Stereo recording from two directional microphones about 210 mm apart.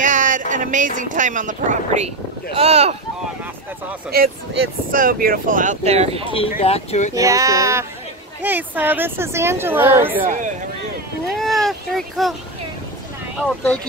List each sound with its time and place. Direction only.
0.0 s speech: 35° right (ahead or behind)
4.9 s speech: 40° right (ahead or behind)
6.6 s speech: 30° left (ahead or behind)
7.2 s a woman's voice: 15° right (ahead or behind)
10.2 s speech: 40° right (ahead or behind)
11.3 s a sound: centre (ahead or behind)